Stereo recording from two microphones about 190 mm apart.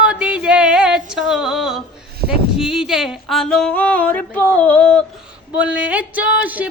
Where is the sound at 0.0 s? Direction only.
5° right (ahead or behind).